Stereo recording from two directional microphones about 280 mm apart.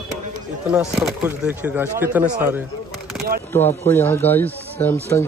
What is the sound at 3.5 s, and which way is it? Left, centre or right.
Speech, centre.